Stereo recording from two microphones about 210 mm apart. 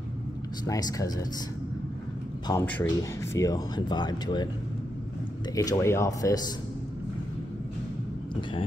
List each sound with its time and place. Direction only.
0.7 s speech: 15° left (ahead or behind)
2.6 s speech: 10° left (ahead or behind)
5.5 s speech: 15° left (ahead or behind)